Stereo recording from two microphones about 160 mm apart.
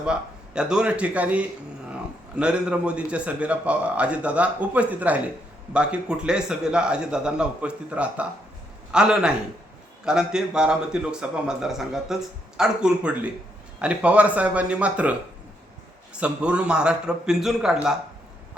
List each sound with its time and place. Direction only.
0.0 s a man's voice: 5° right (ahead or behind)
16.2 s a man's voice: 5° right (ahead or behind)